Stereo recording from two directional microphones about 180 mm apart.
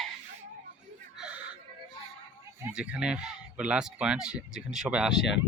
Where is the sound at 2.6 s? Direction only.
5° right (ahead or behind).